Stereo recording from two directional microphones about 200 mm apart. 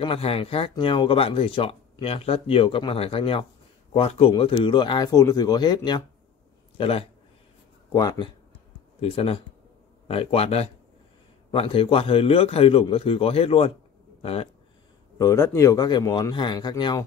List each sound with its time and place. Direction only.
0.0 s speech: 30° left (ahead or behind)
15.1 s speech: 15° left (ahead or behind)